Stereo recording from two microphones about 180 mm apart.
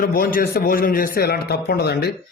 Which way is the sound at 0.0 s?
55° left (ahead or behind).